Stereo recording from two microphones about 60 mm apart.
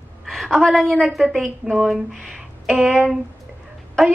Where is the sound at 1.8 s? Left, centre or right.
Centre.